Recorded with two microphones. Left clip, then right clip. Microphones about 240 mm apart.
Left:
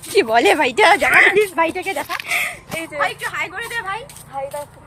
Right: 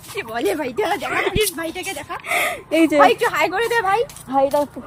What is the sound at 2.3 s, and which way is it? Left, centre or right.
Speech, right.